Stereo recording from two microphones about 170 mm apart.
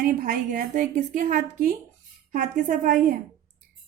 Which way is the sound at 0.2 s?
55° right (ahead or behind).